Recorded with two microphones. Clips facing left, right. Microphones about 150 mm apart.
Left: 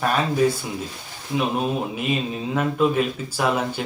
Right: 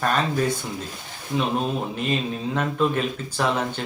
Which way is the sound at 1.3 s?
5° left (ahead or behind).